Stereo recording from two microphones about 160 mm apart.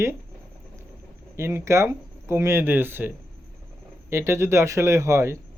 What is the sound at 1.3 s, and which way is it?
Speech, 15° right (ahead or behind).